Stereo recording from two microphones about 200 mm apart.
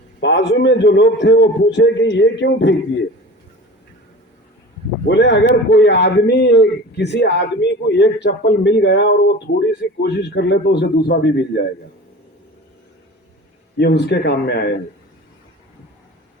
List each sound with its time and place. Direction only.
0.2 s a man's voice: 65° left (ahead or behind)
5.0 s a man's voice: 60° left (ahead or behind)
13.7 s a man's voice: 60° left (ahead or behind)